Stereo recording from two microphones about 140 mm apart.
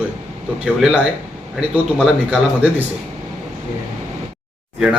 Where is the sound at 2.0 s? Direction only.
10° right (ahead or behind).